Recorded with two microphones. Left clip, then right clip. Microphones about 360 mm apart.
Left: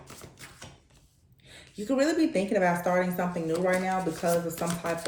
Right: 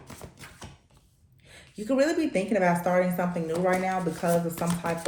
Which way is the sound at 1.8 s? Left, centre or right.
Right.